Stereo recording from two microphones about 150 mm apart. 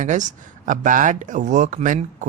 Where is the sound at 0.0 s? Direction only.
55° right (ahead or behind).